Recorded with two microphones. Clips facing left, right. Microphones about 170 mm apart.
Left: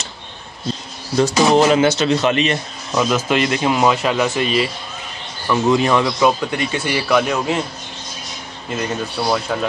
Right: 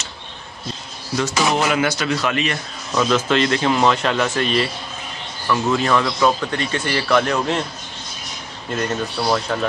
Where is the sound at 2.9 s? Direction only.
10° left (ahead or behind).